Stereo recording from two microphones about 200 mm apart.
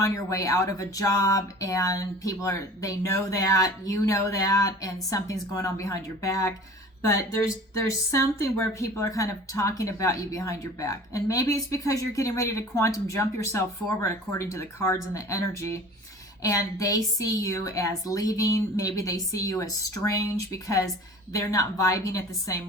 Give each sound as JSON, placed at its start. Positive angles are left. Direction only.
{"t": 0.0, "sound": "speech", "side_deg": 15}